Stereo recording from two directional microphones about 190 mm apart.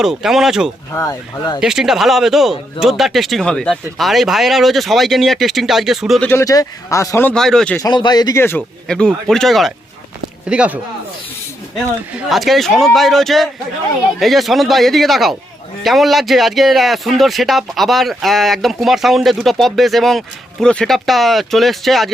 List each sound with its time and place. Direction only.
0.0 s speech: centre (ahead or behind)
0.9 s speech: 20° left (ahead or behind)
1.6 s speech: centre (ahead or behind)
6.2 s speech: 15° left (ahead or behind)
7.8 s speech: 20° left (ahead or behind); by 10.8 s 5° right (ahead or behind)
12.1 s speech: centre (ahead or behind)